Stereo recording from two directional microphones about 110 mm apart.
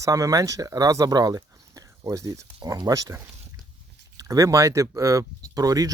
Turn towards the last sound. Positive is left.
turn(degrees=-35)  # may be behind; listen again after turning